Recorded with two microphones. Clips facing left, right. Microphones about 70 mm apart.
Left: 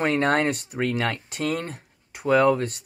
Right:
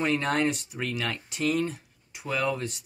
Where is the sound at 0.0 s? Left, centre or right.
Left.